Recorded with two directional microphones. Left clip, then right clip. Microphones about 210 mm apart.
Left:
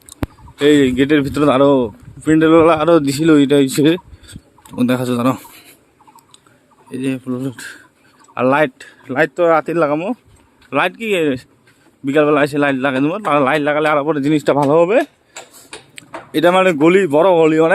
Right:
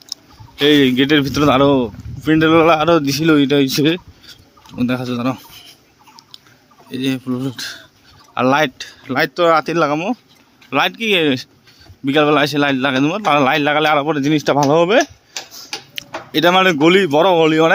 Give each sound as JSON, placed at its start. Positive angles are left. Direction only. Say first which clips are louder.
{"t": 0.5, "sound": "speech", "louder": "even", "side_deg": 5}
{"t": 6.9, "sound": "speech", "louder": "right 1 dB", "side_deg": 5}